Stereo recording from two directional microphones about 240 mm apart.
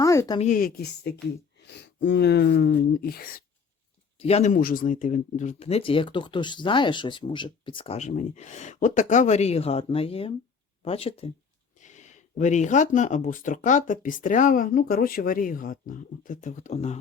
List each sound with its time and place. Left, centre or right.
0.0 s a sound: centre
0.3 s speech: left
4.2 s speech: left